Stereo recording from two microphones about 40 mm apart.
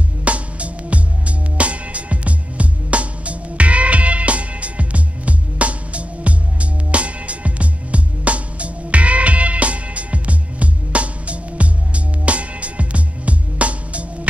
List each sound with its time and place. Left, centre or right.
0.2 s music: right